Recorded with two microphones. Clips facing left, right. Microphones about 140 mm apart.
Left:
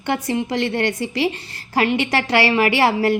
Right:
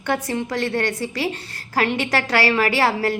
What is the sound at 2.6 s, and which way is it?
Speech, 35° right (ahead or behind).